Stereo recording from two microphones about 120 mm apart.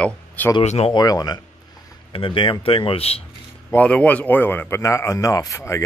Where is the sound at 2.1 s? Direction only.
45° left (ahead or behind).